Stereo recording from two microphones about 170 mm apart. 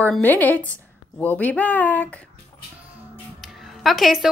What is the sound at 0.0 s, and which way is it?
A woman's voice, 10° left (ahead or behind).